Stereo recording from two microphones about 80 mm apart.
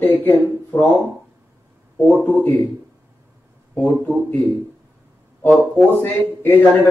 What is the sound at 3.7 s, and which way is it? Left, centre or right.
Speech, left.